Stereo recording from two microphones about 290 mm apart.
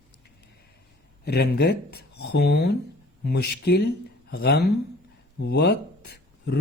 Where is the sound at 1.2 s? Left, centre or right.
Left.